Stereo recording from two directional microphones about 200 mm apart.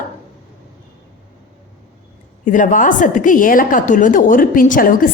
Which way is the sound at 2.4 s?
40° left (ahead or behind).